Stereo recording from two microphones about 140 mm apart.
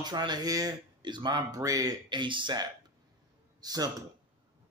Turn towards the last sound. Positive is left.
turn(degrees=-25)  # may be behind; listen again after turning